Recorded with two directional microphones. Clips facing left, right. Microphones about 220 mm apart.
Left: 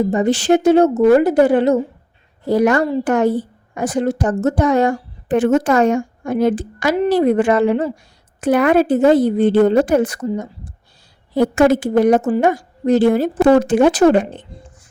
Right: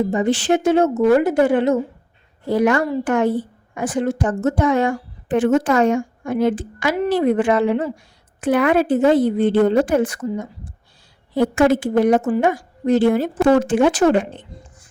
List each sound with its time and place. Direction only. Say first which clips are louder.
0.1 s a woman's voice: left 3 dB; 40° left (ahead or behind)